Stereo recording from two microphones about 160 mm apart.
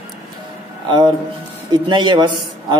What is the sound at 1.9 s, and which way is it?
Speech, 30° right (ahead or behind).